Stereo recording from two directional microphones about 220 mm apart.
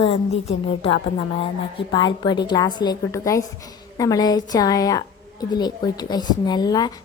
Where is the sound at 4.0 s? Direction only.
15° left (ahead or behind).